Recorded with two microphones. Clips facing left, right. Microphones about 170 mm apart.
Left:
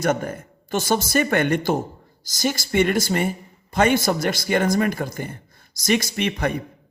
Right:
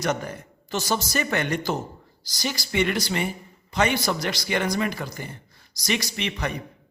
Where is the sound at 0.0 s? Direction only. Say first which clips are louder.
Left 4 dB; 50° left (ahead or behind).